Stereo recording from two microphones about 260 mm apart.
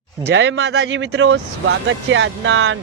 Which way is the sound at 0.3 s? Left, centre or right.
Right.